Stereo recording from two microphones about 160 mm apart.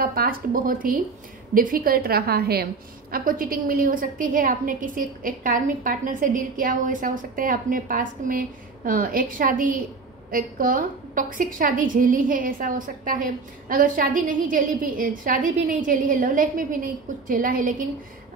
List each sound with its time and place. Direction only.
0.0 s a woman's voice: 65° right (ahead or behind)